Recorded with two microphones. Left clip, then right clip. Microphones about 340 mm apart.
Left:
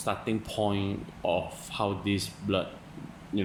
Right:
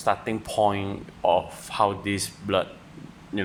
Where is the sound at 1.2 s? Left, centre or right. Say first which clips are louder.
Right 7 dB; right.